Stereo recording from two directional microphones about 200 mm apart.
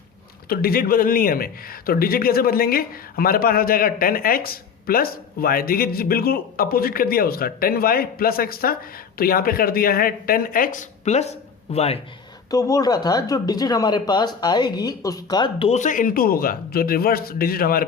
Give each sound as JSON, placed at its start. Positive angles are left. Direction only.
{"t": 0.4, "sound": "a man's voice", "side_deg": 50}
{"t": 12.5, "sound": "speech", "side_deg": 15}